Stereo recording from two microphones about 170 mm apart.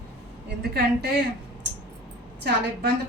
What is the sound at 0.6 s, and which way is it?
Speech, 70° right (ahead or behind).